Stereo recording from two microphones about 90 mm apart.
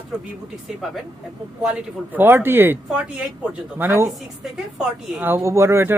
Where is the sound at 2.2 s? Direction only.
25° right (ahead or behind).